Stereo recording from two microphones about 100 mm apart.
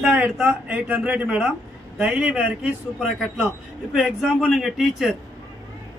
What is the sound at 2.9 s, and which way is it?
A man's voice, 5° right (ahead or behind).